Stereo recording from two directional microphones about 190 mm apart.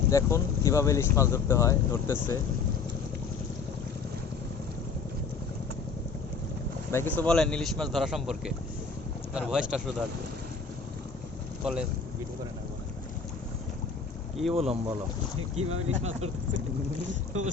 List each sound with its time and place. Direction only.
0.1 s speech: 15° left (ahead or behind)
6.9 s speech: 10° left (ahead or behind)
11.6 s speech: 5° right (ahead or behind)
14.5 s speech: 30° right (ahead or behind)
15.4 s speech: 90° right
17.1 s speech: 35° right (ahead or behind)